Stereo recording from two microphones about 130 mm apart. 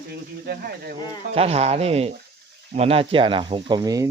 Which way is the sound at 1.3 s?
50° right (ahead or behind).